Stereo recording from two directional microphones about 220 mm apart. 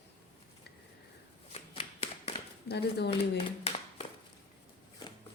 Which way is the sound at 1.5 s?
25° left (ahead or behind).